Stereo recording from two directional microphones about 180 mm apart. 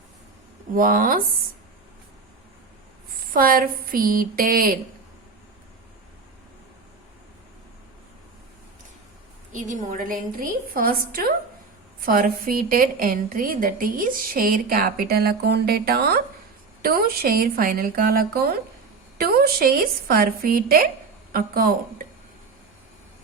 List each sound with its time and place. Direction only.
0.7 s a woman's voice: 50° right (ahead or behind)
3.3 s a woman's voice: 50° right (ahead or behind)
9.5 s a woman's voice: 45° right (ahead or behind)